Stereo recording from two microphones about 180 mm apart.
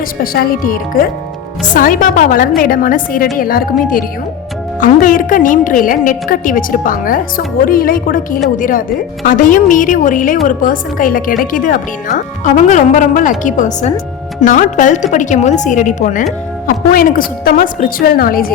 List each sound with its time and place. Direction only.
0.2 s a woman's voice: 55° left (ahead or behind)